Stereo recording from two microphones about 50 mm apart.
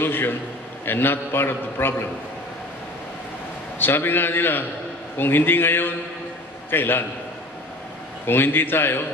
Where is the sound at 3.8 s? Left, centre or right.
Left.